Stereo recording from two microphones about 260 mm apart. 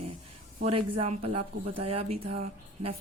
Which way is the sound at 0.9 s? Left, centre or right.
Right.